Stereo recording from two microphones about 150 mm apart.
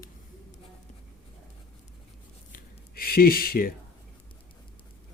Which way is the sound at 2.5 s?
90° left.